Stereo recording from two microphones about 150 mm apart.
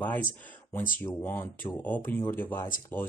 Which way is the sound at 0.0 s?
10° left (ahead or behind).